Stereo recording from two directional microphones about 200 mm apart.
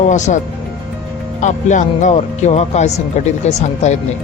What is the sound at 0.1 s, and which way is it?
Speech, 35° left (ahead or behind).